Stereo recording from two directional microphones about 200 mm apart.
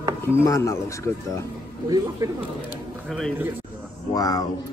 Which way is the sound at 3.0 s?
Centre (ahead or behind).